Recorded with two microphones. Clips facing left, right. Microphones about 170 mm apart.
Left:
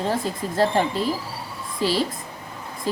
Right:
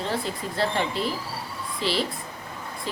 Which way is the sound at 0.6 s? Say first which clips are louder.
Left 5 dB; 40° left (ahead or behind).